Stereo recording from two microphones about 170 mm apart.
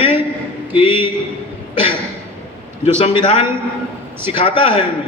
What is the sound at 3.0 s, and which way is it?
Speech, 25° left (ahead or behind).